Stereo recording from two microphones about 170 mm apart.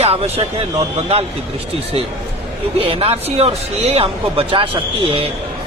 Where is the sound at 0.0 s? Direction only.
35° right (ahead or behind).